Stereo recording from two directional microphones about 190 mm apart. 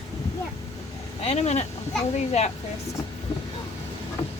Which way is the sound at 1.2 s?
35° left (ahead or behind).